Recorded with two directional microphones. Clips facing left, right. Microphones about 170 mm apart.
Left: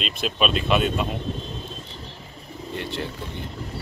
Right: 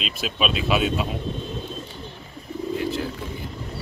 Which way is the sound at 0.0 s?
Centre (ahead or behind).